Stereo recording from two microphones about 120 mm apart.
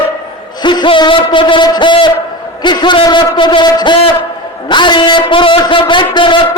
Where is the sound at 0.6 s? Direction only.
40° left (ahead or behind).